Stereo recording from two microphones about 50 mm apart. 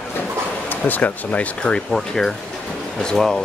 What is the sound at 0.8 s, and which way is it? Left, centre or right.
A man's voice, left.